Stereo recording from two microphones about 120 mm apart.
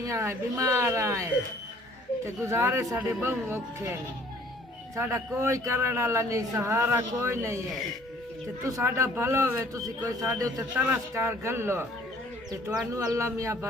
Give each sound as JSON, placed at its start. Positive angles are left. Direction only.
{"t": 0.0, "sound": "speech", "side_deg": -25}
{"t": 4.9, "sound": "speech", "side_deg": -20}
{"t": 8.6, "sound": "speech", "side_deg": -25}
{"t": 10.8, "sound": "speech", "side_deg": -15}
{"t": 12.9, "sound": "speech", "side_deg": -25}